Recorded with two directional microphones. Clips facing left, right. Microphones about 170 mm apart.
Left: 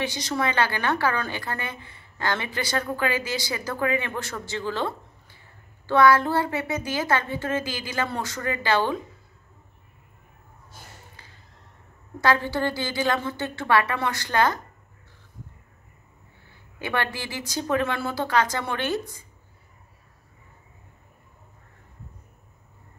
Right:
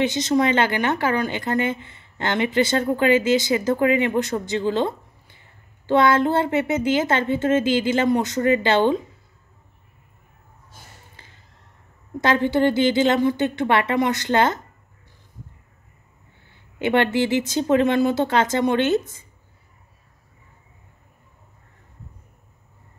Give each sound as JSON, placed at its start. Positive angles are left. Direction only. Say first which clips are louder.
{"t": 0.0, "sound": "a woman's voice", "louder": "right 7 dB", "side_deg": -20}
{"t": 11.2, "sound": "a sound", "louder": "right 1 dB", "side_deg": -25}
{"t": 12.2, "sound": "a woman's voice", "louder": "right 5 dB", "side_deg": -20}
{"t": 16.7, "sound": "a woman's voice", "louder": "right 9 dB", "side_deg": -20}